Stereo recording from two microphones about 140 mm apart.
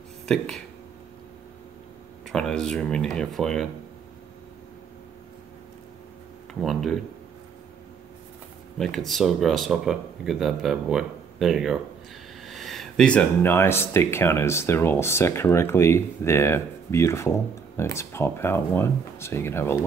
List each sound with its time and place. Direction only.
2.2 s speech: 5° left (ahead or behind)
6.6 s speech: centre (ahead or behind)
8.7 s speech: centre (ahead or behind); by 19.8 s 20° left (ahead or behind)